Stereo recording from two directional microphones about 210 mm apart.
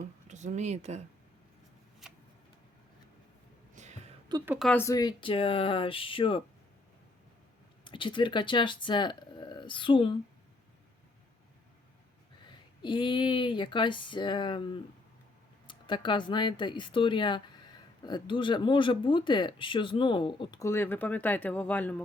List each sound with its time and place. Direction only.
0.3 s speech: 35° right (ahead or behind)
2.0 s shuffling cards: centre (ahead or behind)
3.8 s a sound: 35° right (ahead or behind)
4.3 s a woman's voice: 15° right (ahead or behind)
4.7 s speech: 15° left (ahead or behind)
7.9 s speech: 25° left (ahead or behind)
12.5 s speech: 25° left (ahead or behind); by 22.0 s 5° left (ahead or behind)